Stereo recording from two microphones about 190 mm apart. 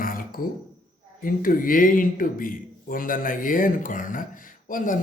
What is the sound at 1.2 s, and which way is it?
A man's voice, 50° left (ahead or behind).